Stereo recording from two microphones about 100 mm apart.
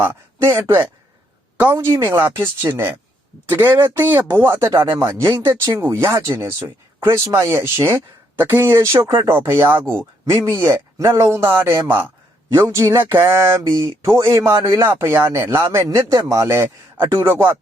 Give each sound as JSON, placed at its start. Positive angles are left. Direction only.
{"t": 0.0, "sound": "speech", "side_deg": -20}
{"t": 9.8, "sound": "speech", "side_deg": 10}
{"t": 10.2, "sound": "speech", "side_deg": -30}